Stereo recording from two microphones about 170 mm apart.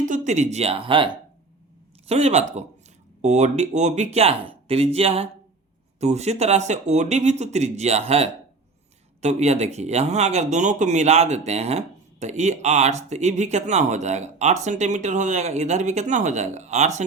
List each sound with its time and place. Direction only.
0.0 s speech: 45° right (ahead or behind)